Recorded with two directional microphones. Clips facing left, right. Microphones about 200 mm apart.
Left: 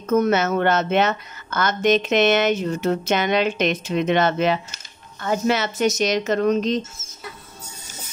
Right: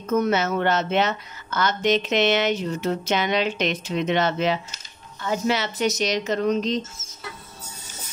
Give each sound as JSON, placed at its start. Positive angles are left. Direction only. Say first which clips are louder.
{"t": 0.1, "sound": "a woman's voice", "louder": "left 3 dB", "side_deg": 50}